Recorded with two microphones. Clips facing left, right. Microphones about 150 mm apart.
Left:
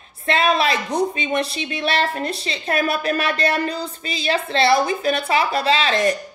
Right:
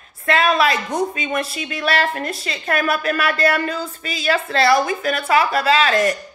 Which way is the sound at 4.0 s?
25° left (ahead or behind).